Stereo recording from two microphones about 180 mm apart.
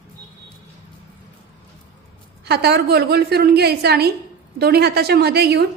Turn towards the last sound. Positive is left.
turn(degrees=-65)  # may be behind; listen again after turning